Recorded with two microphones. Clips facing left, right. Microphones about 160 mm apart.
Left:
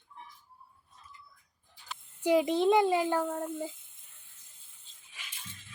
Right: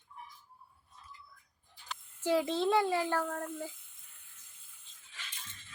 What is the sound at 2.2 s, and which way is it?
Speech, 15° left (ahead or behind).